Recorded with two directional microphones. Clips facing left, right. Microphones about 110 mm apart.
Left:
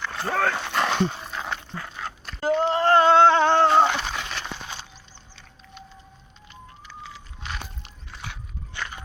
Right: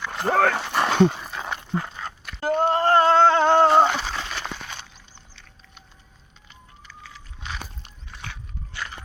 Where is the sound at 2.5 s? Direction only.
50° right (ahead or behind).